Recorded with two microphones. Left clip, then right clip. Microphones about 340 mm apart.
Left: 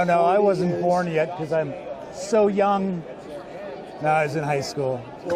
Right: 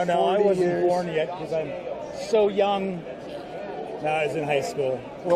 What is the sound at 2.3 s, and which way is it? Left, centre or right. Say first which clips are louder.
Speech: left 2 dB; left.